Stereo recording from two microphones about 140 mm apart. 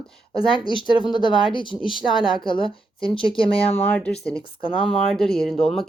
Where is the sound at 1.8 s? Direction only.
5° right (ahead or behind).